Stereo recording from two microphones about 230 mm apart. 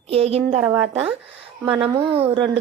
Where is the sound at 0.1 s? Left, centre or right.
Right.